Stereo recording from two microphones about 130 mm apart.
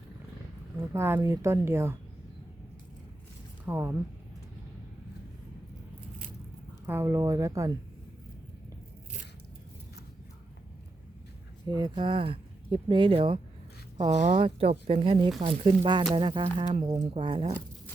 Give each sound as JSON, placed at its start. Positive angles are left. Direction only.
{"t": 0.8, "sound": "a woman's voice", "side_deg": -20}
{"t": 3.7, "sound": "speech", "side_deg": -20}
{"t": 6.8, "sound": "a woman's voice", "side_deg": -20}
{"t": 11.7, "sound": "speech", "side_deg": -35}
{"t": 14.2, "sound": "speech", "side_deg": -85}
{"t": 14.4, "sound": "speech", "side_deg": -45}